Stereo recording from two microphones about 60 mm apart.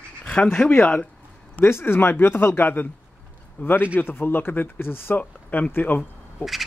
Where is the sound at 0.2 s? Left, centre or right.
Centre.